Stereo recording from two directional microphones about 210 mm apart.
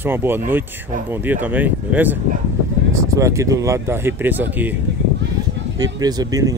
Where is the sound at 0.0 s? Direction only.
10° right (ahead or behind).